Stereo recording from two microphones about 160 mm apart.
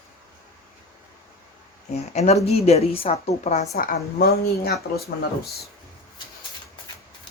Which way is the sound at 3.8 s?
70° left (ahead or behind).